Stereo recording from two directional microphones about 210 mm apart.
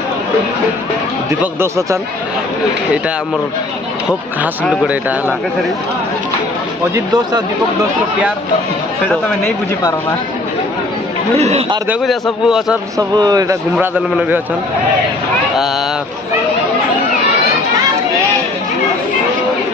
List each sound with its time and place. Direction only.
1.4 s a man's voice: 10° right (ahead or behind)
11.3 s a man's voice: 30° right (ahead or behind)
11.9 s a man's voice: centre (ahead or behind)
12.9 s a man's voice: 20° right (ahead or behind)